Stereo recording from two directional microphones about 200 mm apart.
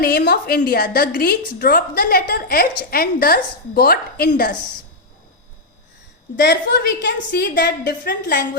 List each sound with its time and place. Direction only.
0.0 s a woman's voice: 50° left (ahead or behind)
6.4 s a woman's voice: 55° left (ahead or behind)